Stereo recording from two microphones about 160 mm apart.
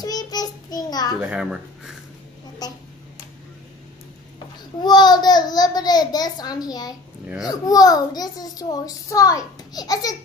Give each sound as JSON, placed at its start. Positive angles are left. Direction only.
{"t": 0.0, "sound": "child singing", "side_deg": 25}
{"t": 1.2, "sound": "a child's voice", "side_deg": -5}
{"t": 2.6, "sound": "a sound", "side_deg": 25}
{"t": 4.8, "sound": "a child's voice", "side_deg": 25}